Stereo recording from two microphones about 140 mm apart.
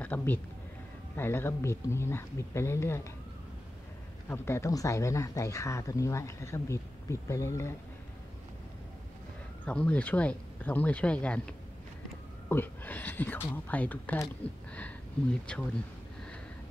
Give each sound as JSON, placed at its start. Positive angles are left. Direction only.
{"t": 0.0, "sound": "speech", "side_deg": 15}
{"t": 4.3, "sound": "speech", "side_deg": 20}
{"t": 9.7, "sound": "speech", "side_deg": 10}